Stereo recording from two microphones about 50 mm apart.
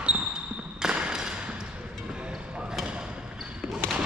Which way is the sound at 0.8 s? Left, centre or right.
Centre.